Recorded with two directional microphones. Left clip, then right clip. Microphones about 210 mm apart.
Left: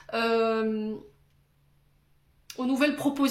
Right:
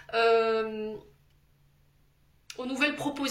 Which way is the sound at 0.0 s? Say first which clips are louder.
Right 2 dB; 50° left (ahead or behind).